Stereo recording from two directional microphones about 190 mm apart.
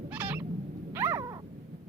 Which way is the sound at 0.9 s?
15° right (ahead or behind).